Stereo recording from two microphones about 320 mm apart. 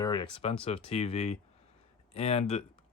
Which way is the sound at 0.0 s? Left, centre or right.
Centre.